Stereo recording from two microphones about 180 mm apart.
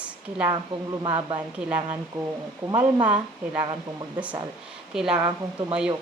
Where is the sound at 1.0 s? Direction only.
25° right (ahead or behind).